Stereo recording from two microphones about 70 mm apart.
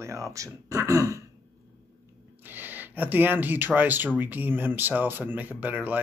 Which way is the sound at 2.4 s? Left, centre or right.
Right.